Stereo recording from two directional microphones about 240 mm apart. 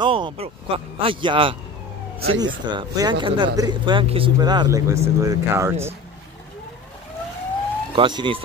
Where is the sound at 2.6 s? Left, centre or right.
Centre.